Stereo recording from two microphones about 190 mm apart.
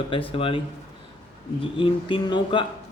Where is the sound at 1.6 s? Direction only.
25° left (ahead or behind).